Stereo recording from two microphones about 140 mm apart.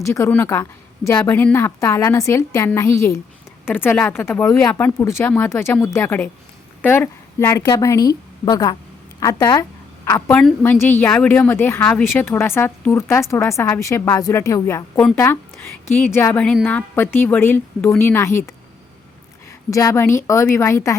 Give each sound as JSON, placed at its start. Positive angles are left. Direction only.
{"t": 0.0, "sound": "a woman's voice", "side_deg": 20}
{"t": 14.9, "sound": "a woman's voice", "side_deg": 10}
{"t": 16.4, "sound": "a woman's voice", "side_deg": 5}